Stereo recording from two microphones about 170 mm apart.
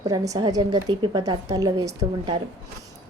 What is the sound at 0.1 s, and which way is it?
A woman's voice, 20° right (ahead or behind).